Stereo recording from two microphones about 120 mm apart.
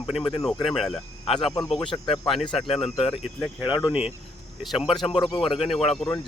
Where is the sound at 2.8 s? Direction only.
55° left (ahead or behind).